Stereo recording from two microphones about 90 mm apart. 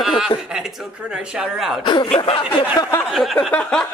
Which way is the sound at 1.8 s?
65° left (ahead or behind).